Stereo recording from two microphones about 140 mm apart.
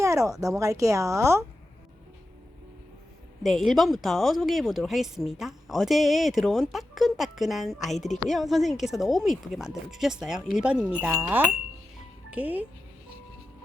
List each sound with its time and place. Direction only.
0.0 s speech: 20° right (ahead or behind)
3.4 s speech: centre (ahead or behind)
7.9 s a woman's voice: 60° left (ahead or behind)
8.3 s speech: centre (ahead or behind)